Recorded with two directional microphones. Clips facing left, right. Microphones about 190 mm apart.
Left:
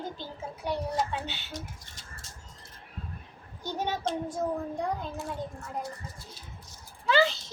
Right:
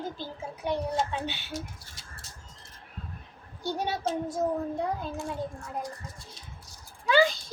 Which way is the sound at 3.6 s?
10° right (ahead or behind).